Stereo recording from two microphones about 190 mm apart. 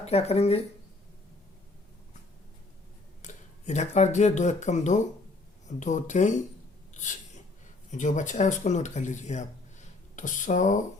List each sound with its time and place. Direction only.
0.0 s speech: 35° left (ahead or behind)
3.2 s speech: 40° left (ahead or behind)
6.9 s a sound: 40° left (ahead or behind)
7.9 s speech: 40° left (ahead or behind)